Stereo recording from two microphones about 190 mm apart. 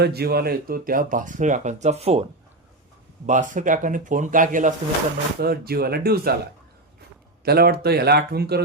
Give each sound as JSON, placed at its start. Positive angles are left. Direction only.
{"t": 0.0, "sound": "speech", "side_deg": -55}
{"t": 3.2, "sound": "speech", "side_deg": -40}
{"t": 7.4, "sound": "speech", "side_deg": -55}